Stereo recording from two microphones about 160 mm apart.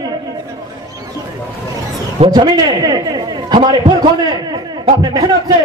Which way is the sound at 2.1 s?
30° right (ahead or behind).